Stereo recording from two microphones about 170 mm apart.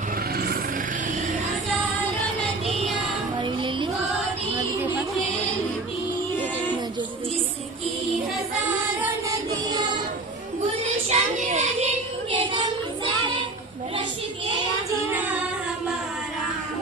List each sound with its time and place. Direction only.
2.6 s music: centre (ahead or behind)
3.3 s child singing: 30° right (ahead or behind)
9.0 s child singing: 20° right (ahead or behind)
10.8 s child singing: 45° right (ahead or behind)
12.3 s child singing: 30° right (ahead or behind)